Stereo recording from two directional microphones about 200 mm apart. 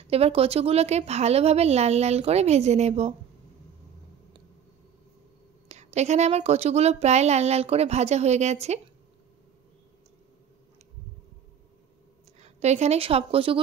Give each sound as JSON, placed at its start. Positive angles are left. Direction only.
{"t": 0.0, "sound": "speech", "side_deg": -30}
{"t": 5.7, "sound": "speech", "side_deg": -35}
{"t": 12.4, "sound": "a woman's voice", "side_deg": -35}